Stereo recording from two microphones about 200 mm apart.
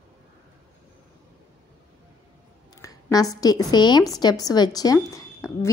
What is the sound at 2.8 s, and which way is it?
A woman's voice, 20° left (ahead or behind).